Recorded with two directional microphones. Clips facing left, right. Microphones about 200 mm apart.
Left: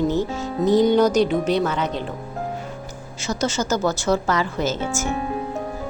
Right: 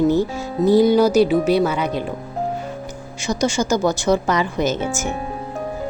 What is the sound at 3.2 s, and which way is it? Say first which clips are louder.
A woman's voice: right 3 dB; 15° right (ahead or behind).